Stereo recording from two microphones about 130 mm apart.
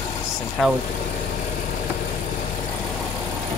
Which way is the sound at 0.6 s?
5° left (ahead or behind).